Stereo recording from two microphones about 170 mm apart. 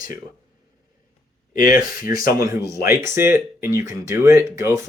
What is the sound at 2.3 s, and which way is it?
Speech, 20° right (ahead or behind).